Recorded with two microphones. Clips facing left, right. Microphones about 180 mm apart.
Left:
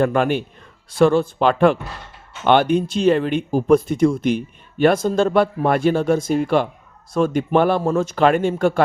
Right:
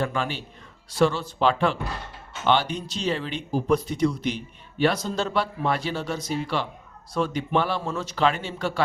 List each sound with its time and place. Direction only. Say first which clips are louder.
0.0 s speech: left 10 dB; 55° left (ahead or behind)